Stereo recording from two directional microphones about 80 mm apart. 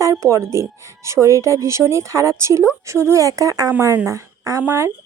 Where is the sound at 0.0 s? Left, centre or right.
Right.